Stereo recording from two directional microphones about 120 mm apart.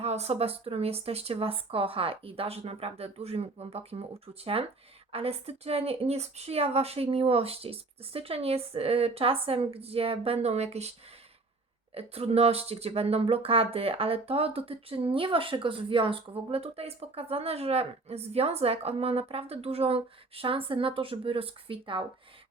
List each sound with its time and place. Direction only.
0.0 s speech: 60° right (ahead or behind)
11.9 s speech: 55° right (ahead or behind)